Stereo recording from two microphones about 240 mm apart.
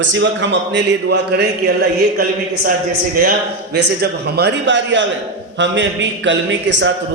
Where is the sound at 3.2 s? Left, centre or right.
Right.